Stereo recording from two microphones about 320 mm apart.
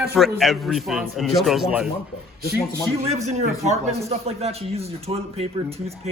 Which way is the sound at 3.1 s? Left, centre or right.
Centre.